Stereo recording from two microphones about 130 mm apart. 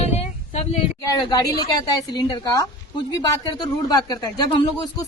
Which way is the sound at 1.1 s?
30° left (ahead or behind).